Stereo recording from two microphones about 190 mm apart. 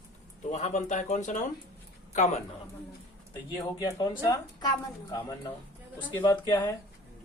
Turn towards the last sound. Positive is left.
turn(degrees=15)  # may be behind; listen again after turning